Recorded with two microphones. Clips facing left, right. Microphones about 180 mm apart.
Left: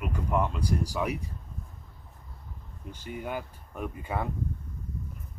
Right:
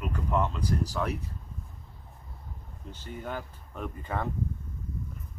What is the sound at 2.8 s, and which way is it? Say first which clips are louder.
Speech: left 2 dB; 10° left (ahead or behind).